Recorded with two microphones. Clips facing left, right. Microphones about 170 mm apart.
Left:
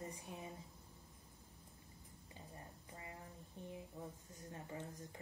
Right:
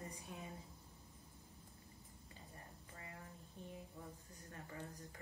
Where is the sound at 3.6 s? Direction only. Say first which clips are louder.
Left 2 dB; 20° left (ahead or behind).